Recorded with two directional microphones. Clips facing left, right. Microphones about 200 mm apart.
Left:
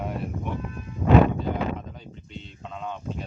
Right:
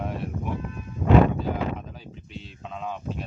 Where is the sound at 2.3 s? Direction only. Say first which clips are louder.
Right 1 dB; centre (ahead or behind).